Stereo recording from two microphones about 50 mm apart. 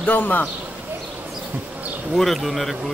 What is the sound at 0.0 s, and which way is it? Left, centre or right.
Speech, left.